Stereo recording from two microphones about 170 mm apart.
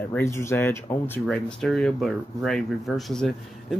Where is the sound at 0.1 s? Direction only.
15° left (ahead or behind).